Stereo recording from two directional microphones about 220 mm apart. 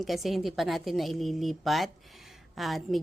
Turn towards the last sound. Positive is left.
turn(degrees=0)  # may be behind; listen again after turning